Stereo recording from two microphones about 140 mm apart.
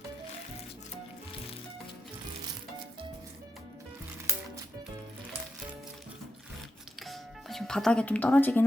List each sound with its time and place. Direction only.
7.0 s speech: centre (ahead or behind)